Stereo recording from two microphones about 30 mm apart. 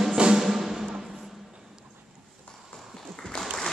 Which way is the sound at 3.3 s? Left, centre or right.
Left.